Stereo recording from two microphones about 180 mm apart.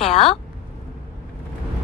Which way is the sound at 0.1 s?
30° left (ahead or behind).